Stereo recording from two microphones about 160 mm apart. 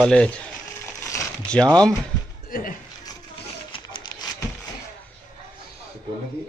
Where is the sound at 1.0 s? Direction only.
20° left (ahead or behind).